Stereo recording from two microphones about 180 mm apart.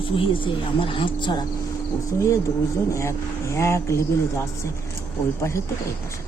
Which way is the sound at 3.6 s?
15° left (ahead or behind).